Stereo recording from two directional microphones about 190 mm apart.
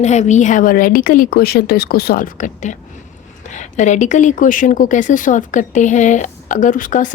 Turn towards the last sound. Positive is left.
turn(degrees=45)  # may be behind; listen again after turning